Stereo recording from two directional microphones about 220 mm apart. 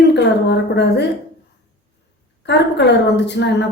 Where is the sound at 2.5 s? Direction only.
50° left (ahead or behind).